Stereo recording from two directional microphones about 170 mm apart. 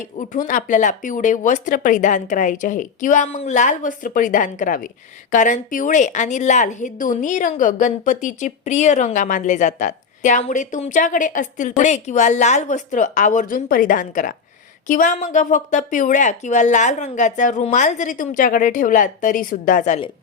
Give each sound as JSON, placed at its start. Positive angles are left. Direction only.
{"t": 0.0, "sound": "a woman's voice", "side_deg": 50}